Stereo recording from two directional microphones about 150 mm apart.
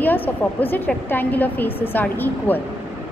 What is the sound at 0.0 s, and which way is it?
A woman's voice, 10° left (ahead or behind).